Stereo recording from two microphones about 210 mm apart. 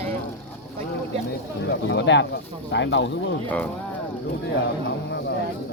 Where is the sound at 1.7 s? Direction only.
55° left (ahead or behind).